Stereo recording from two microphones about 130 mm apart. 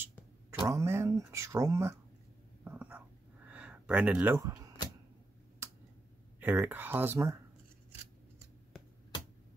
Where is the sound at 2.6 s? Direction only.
10° right (ahead or behind).